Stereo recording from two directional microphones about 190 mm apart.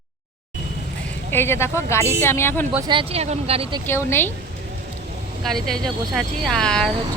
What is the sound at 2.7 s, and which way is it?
Speech, 20° right (ahead or behind).